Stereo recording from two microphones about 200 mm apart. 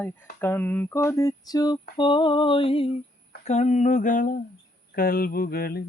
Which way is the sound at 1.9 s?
25° left (ahead or behind).